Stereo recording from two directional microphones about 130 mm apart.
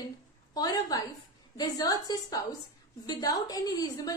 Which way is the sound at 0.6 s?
30° left (ahead or behind).